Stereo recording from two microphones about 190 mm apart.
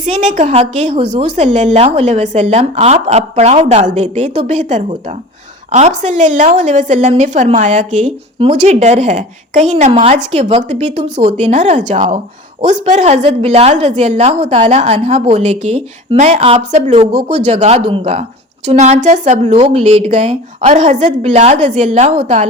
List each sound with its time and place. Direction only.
0.0 s a woman's voice: 40° right (ahead or behind)